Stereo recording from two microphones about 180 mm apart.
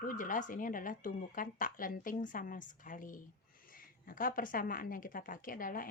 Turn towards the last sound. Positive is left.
turn(degrees=50)  # may be behind; listen again after turning